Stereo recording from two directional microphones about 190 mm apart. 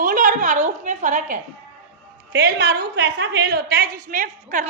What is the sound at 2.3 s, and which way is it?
A woman's voice, 60° right (ahead or behind).